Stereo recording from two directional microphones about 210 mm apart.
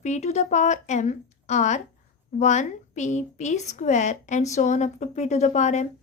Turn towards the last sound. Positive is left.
turn(degrees=35)  # may be behind; listen again after turning